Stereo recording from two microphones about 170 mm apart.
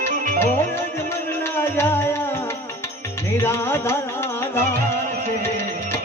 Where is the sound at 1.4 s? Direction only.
15° left (ahead or behind).